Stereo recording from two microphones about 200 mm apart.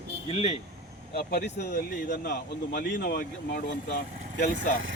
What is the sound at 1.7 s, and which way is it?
Speech, 45° left (ahead or behind).